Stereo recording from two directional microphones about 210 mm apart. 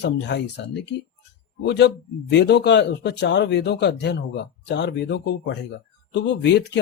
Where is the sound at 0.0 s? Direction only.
55° left (ahead or behind).